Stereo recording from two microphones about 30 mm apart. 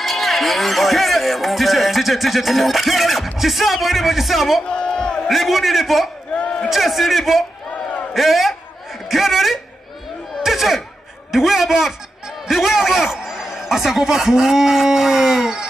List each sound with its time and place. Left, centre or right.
0.0 s a man's voice: centre
4.8 s crowd: left
5.3 s a man's voice: centre
9.1 s a sound: centre
11.3 s a man's voice: centre